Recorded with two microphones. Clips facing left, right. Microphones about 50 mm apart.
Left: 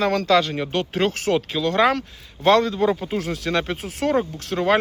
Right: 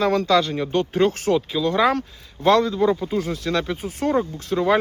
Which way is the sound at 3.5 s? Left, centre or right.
Left.